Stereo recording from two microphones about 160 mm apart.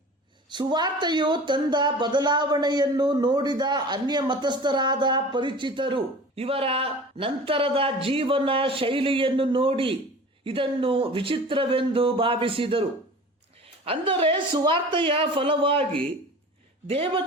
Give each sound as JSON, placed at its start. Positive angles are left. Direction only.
{"t": 0.5, "sound": "speech", "side_deg": -30}